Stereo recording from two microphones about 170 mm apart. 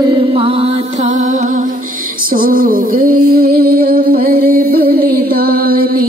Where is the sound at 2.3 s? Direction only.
55° right (ahead or behind).